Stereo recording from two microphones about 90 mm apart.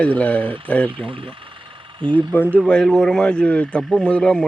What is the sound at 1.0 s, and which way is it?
Speech, 80° right.